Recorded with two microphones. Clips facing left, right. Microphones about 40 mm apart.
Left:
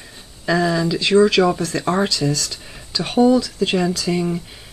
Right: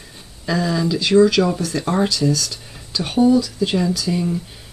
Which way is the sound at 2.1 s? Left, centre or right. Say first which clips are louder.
Right 2 dB; left.